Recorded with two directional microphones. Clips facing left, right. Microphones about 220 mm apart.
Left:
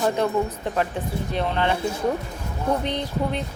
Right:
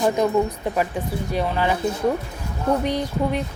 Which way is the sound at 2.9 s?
10° right (ahead or behind).